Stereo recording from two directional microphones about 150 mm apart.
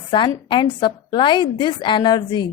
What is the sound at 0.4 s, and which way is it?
A woman's voice, 30° left (ahead or behind).